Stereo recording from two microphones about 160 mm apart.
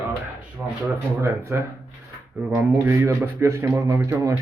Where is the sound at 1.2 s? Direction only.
15° right (ahead or behind).